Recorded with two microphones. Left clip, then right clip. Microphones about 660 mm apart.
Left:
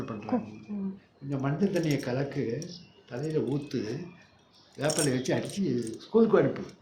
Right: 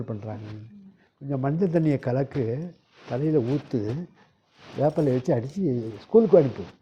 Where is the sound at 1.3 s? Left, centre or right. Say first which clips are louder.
Right 5 dB; right.